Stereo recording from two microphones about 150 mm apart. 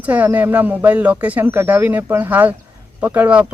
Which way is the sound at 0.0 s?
10° right (ahead or behind).